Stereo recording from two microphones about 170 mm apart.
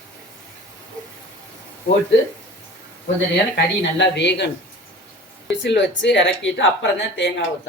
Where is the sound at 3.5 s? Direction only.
90° left.